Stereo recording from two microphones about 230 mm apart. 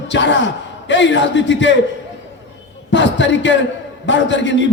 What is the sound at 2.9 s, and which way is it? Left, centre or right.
A man's voice, left.